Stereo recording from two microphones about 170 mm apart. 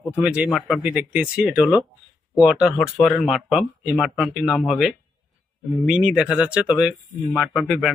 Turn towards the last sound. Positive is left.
turn(degrees=0)  # may be behind; listen again after turning